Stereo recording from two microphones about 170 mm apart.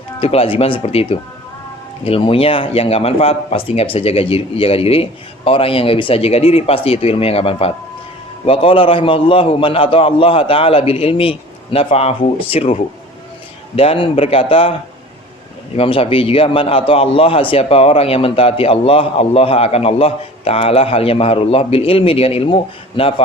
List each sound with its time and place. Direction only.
0.2 s a man's voice: 35° left (ahead or behind)